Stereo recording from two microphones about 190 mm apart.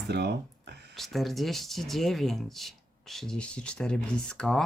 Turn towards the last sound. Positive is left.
turn(degrees=5)  # may be behind; listen again after turning